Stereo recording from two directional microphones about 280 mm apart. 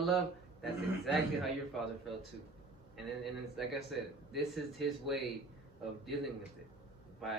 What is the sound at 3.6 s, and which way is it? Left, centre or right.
Speech, centre.